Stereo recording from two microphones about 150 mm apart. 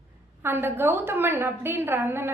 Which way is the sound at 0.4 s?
15° right (ahead or behind).